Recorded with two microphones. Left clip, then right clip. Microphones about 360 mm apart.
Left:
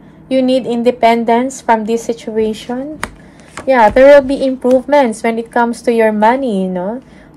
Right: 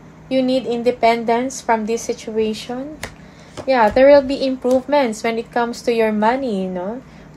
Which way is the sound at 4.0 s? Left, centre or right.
Centre.